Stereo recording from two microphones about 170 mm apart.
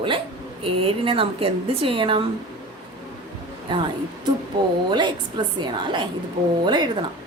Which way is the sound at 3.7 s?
30° right (ahead or behind).